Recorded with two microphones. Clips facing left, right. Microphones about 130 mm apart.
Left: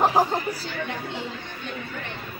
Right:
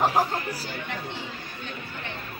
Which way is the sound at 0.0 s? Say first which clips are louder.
Left 3 dB; 20° left (ahead or behind).